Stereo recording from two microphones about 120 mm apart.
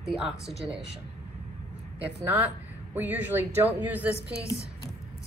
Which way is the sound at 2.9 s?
15° right (ahead or behind).